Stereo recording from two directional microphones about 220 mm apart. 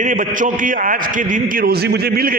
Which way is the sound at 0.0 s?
35° right (ahead or behind).